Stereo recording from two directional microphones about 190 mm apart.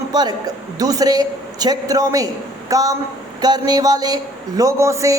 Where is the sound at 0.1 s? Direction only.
20° right (ahead or behind).